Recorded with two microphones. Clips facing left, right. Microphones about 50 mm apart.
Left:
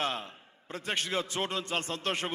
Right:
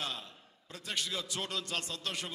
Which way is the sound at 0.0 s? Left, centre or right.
Left.